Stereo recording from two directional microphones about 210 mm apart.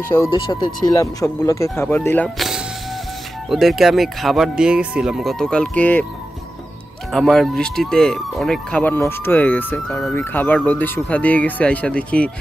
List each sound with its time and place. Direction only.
0.1 s speech: 20° left (ahead or behind)
7.1 s speech: centre (ahead or behind)